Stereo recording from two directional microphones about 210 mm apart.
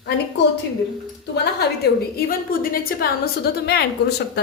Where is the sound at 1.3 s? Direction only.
55° left (ahead or behind).